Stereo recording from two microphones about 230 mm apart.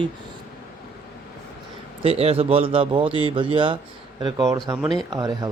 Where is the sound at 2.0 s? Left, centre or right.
Right.